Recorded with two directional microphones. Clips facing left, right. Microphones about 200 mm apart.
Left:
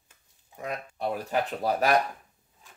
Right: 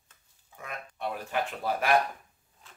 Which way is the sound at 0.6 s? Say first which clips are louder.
Left 5 dB; 35° left (ahead or behind).